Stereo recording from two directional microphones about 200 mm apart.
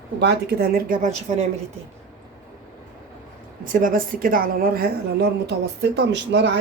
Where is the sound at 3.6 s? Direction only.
45° right (ahead or behind); by 6.6 s 60° right (ahead or behind).